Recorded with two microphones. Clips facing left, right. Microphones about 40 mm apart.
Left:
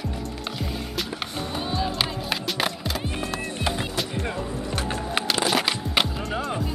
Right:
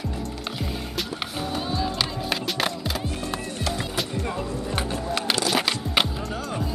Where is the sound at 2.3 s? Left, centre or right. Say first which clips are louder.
Even; centre.